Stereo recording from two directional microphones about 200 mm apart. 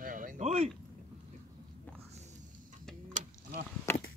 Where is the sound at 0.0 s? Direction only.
45° right (ahead or behind).